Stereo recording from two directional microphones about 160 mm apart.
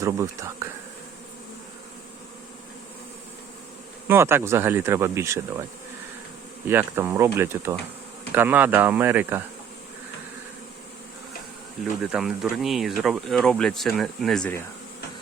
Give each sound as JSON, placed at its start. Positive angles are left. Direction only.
{"t": 0.0, "sound": "speech", "side_deg": -20}
{"t": 4.1, "sound": "speech", "side_deg": -15}
{"t": 6.7, "sound": "speech", "side_deg": -15}
{"t": 12.1, "sound": "speech", "side_deg": 0}